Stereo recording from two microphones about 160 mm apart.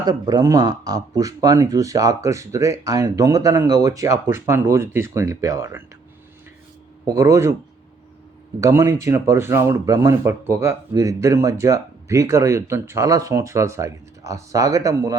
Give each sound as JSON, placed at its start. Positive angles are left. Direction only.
{"t": 0.0, "sound": "speech", "side_deg": -25}
{"t": 7.0, "sound": "speech", "side_deg": -20}
{"t": 8.6, "sound": "speech", "side_deg": -20}